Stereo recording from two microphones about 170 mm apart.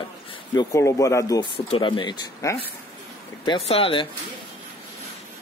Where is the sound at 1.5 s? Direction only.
35° left (ahead or behind); by 2.7 s 15° left (ahead or behind).